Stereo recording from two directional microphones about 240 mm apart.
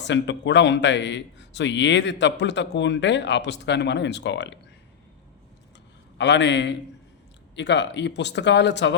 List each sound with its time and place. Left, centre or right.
0.0 s a man's voice: left
6.1 s a man's voice: left